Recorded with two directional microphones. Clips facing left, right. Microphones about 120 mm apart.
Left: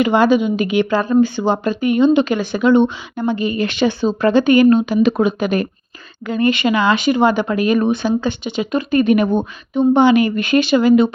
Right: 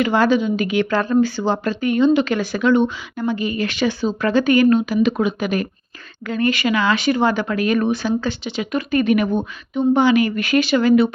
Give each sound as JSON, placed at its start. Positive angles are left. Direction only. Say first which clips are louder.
{"t": 0.0, "sound": "speech", "louder": "left 3 dB", "side_deg": 20}
{"t": 6.2, "sound": "speech", "louder": "left 3 dB", "side_deg": 15}